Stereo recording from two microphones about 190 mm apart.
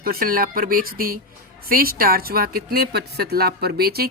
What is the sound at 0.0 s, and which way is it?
A woman's voice, 50° right (ahead or behind).